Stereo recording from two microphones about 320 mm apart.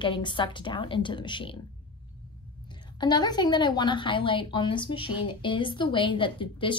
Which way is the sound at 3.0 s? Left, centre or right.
Centre.